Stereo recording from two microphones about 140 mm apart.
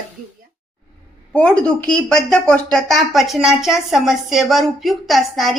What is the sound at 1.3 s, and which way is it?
Speech, 10° left (ahead or behind).